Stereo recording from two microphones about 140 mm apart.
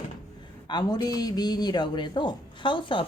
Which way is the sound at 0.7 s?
30° left (ahead or behind).